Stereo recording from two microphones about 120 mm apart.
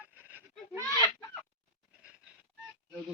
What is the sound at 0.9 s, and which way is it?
Fowl, 25° left (ahead or behind).